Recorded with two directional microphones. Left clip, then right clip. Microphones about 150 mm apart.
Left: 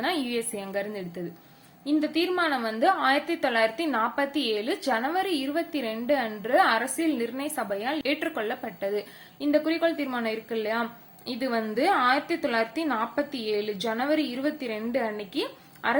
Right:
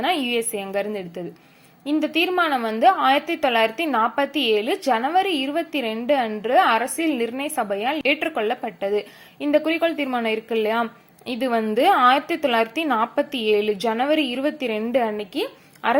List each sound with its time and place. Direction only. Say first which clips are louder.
0.3 s a woman's voice: right 7 dB; 30° right (ahead or behind)